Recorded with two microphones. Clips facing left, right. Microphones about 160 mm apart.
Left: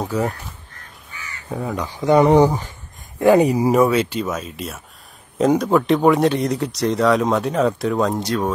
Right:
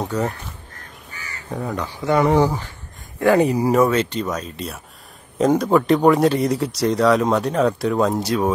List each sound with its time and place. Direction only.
0.0 s speech: 5° left (ahead or behind)
1.5 s speech: 5° left (ahead or behind)
2.0 s speech: 20° left (ahead or behind); by 8.5 s 10° right (ahead or behind)